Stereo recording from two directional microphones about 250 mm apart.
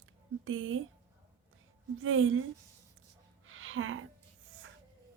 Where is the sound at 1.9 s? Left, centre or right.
Right.